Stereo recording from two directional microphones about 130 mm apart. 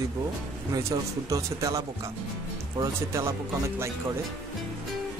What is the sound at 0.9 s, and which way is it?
Speech, 30° right (ahead or behind).